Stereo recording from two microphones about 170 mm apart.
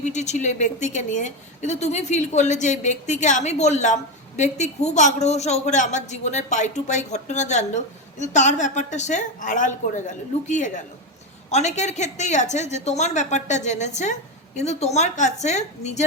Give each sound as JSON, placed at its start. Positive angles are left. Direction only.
{"t": 0.0, "sound": "a woman's voice", "side_deg": 45}